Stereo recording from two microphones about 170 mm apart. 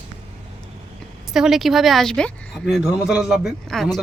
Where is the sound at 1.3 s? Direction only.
Centre (ahead or behind).